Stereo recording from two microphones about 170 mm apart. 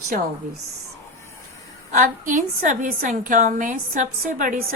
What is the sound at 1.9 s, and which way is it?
A woman's voice, 50° right (ahead or behind).